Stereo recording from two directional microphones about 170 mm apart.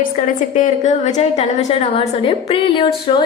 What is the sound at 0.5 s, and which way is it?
A woman's voice, 45° left (ahead or behind).